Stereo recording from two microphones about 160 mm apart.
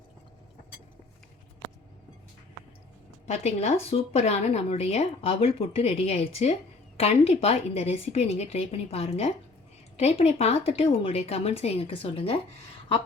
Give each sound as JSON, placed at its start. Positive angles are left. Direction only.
{"t": 3.2, "sound": "a woman's voice", "side_deg": 45}